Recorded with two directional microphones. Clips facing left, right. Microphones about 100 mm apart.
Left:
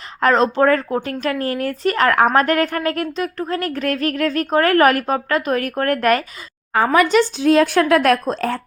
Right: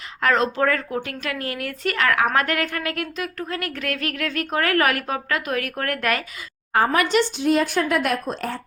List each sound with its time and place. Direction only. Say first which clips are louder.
0.2 s a woman's voice: left 5 dB; 35° left (ahead or behind)
7.4 s a woman's voice: left 6 dB; 90° left